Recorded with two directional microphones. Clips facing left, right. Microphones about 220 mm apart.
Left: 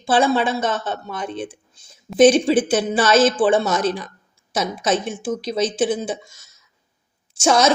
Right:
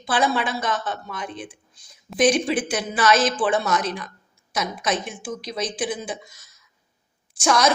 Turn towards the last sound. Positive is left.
turn(degrees=25)  # may be behind; listen again after turning